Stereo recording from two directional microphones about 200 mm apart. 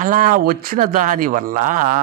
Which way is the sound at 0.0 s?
40° right (ahead or behind).